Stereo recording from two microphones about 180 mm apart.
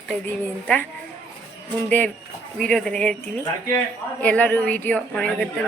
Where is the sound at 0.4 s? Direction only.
10° left (ahead or behind).